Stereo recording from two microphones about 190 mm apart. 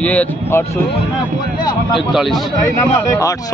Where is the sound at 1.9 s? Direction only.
Centre (ahead or behind).